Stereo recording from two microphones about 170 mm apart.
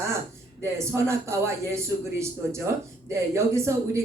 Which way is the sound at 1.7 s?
15° right (ahead or behind).